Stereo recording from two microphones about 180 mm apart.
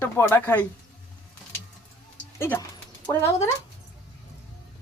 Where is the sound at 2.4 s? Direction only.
15° left (ahead or behind).